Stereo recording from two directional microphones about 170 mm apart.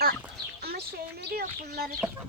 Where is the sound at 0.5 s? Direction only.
70° right (ahead or behind).